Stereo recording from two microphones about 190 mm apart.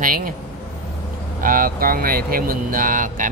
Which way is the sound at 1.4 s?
45° right (ahead or behind).